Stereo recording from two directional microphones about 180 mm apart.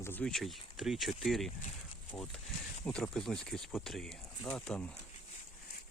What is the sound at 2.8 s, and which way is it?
Speech, 5° left (ahead or behind).